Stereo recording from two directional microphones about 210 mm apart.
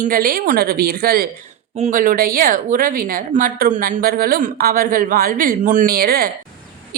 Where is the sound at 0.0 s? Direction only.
45° right (ahead or behind).